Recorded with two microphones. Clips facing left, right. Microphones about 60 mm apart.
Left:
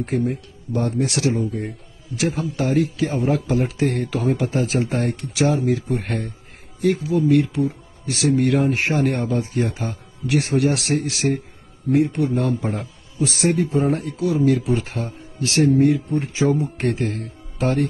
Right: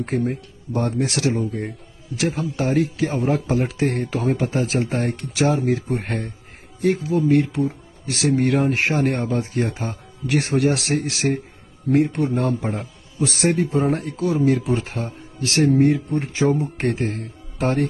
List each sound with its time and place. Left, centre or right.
0.7 s speech: right
10.2 s speech: right
11.9 s speech: right
12.2 s a man's voice: right
13.2 s speech: right
16.7 s speech: right